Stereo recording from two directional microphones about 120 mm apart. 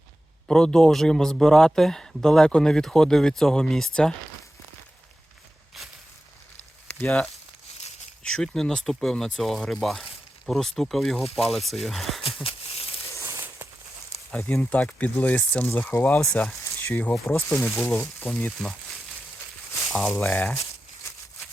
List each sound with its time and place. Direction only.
0.4 s speech: 5° left (ahead or behind)
8.2 s speech: 5° left (ahead or behind)
12.2 s a sound: 50° left (ahead or behind)
13.2 s a sound: 20° right (ahead or behind)
14.4 s speech: 10° left (ahead or behind)
19.9 s speech: centre (ahead or behind)
20.1 s speech: 15° left (ahead or behind)